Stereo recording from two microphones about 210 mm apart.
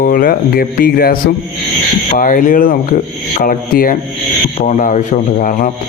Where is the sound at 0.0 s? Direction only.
45° left (ahead or behind).